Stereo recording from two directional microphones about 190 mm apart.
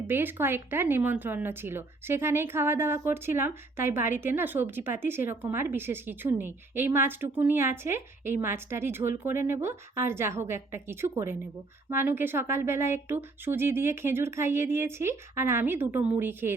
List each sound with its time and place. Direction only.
0.1 s speech: 10° right (ahead or behind)